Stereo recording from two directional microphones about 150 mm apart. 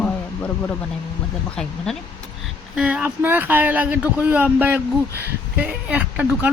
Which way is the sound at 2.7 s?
10° right (ahead or behind).